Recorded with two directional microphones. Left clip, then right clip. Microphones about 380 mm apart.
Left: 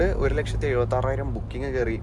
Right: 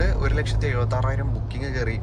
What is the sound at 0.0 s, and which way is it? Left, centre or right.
Speech, centre.